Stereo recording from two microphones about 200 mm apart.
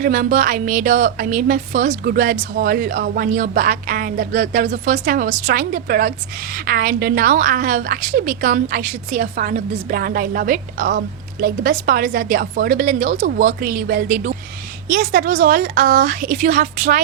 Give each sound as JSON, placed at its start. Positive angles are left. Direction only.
{"t": 0.0, "sound": "a woman's voice", "side_deg": -40}